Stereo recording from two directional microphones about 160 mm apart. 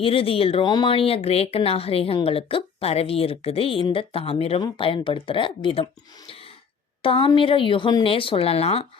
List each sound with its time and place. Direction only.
0.0 s speech: 35° left (ahead or behind)